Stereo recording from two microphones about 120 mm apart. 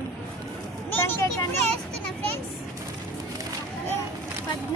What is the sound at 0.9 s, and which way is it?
Speech, 20° left (ahead or behind).